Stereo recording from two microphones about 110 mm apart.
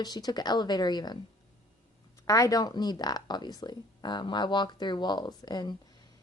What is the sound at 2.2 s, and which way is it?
Speech, 30° left (ahead or behind).